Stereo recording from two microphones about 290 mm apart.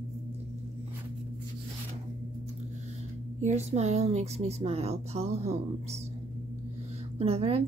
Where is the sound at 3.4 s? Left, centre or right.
Right.